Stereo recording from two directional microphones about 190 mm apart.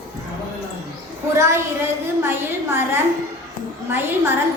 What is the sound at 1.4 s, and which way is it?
A woman's voice, 15° right (ahead or behind).